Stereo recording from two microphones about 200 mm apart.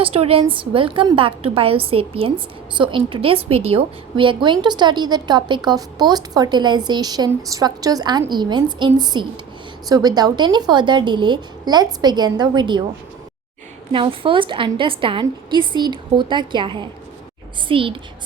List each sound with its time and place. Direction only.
0.0 s a woman's voice: 30° right (ahead or behind)
13.9 s a woman's voice: 25° right (ahead or behind)